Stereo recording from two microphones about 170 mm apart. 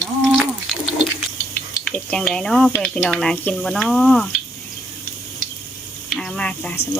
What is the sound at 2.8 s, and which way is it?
Speech, 5° left (ahead or behind).